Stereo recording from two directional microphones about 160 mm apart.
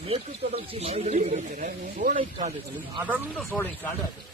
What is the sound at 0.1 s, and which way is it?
Speech, 40° right (ahead or behind).